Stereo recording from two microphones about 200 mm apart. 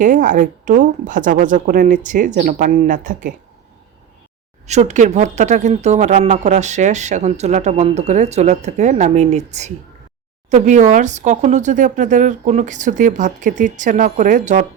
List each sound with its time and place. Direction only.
0.0 s speech: 40° right (ahead or behind)
4.6 s speech: 35° right (ahead or behind)